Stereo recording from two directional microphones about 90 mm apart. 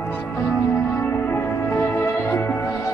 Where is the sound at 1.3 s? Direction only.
25° left (ahead or behind).